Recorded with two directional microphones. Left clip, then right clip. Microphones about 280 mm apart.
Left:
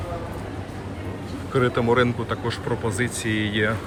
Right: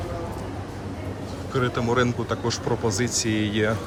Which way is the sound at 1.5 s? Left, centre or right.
Centre.